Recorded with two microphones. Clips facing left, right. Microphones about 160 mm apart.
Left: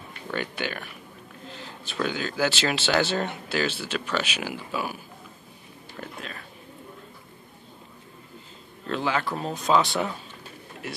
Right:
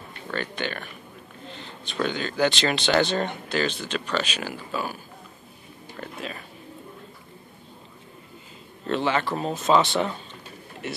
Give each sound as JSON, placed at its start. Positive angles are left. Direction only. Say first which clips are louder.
{"t": 0.3, "sound": "speech", "louder": "even", "side_deg": 10}
{"t": 8.8, "sound": "speech", "louder": "right 3 dB", "side_deg": 0}